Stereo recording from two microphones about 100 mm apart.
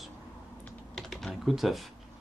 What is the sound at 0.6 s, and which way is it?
Typing, 5° left (ahead or behind).